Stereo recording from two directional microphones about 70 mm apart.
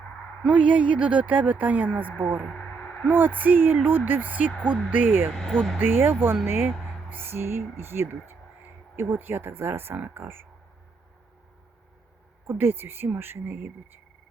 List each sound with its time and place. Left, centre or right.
0.4 s speech: centre
5.3 s speech: centre
5.8 s speech: right
6.7 s a sound: centre
7.1 s speech: right
12.5 s speech: right